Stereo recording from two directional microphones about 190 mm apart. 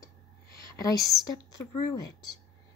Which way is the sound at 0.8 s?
20° left (ahead or behind).